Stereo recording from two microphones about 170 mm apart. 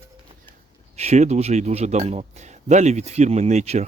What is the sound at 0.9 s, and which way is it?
A man's voice, 40° right (ahead or behind).